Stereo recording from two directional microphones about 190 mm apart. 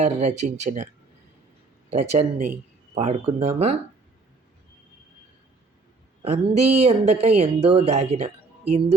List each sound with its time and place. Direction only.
0.0 s speech: 35° right (ahead or behind)
1.9 s speech: 35° right (ahead or behind)
6.2 s speech: 35° right (ahead or behind)